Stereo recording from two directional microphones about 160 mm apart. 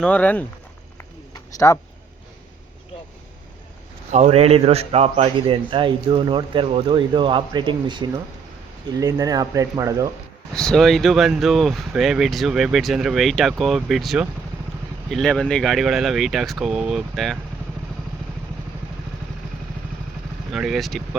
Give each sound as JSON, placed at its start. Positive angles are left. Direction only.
{"t": 0.0, "sound": "speech", "side_deg": 10}
{"t": 0.9, "sound": "a sound", "side_deg": 20}
{"t": 4.1, "sound": "a man's voice", "side_deg": -40}
{"t": 10.5, "sound": "speech", "side_deg": 5}
{"t": 20.5, "sound": "speech", "side_deg": 0}